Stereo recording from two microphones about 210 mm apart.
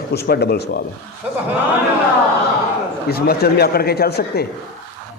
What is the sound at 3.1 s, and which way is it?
A man's voice, 45° left (ahead or behind).